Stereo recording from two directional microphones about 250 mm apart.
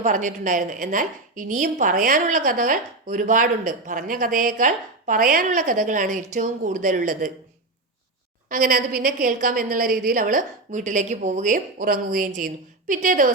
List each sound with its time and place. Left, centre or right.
0.0 s a woman's voice: right
8.4 s a woman's voice: right